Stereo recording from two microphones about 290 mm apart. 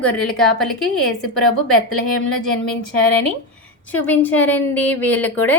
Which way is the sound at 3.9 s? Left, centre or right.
Centre.